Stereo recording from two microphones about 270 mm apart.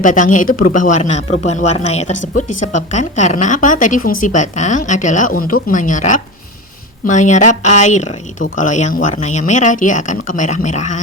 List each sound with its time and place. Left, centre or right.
0.0 s speech: left